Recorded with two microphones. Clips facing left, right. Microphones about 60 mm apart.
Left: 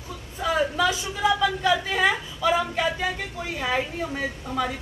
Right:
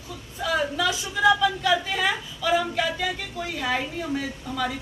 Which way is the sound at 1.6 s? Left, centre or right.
Left.